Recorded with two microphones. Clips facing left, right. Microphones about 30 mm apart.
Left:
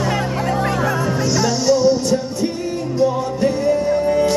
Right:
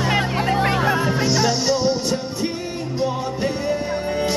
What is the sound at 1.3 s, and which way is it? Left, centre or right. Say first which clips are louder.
Music: left 6 dB; right.